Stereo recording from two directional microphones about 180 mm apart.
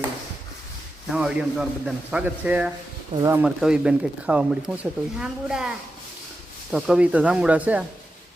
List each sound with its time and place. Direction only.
1.1 s speech: 5° right (ahead or behind)
3.4 s speech: 5° right (ahead or behind)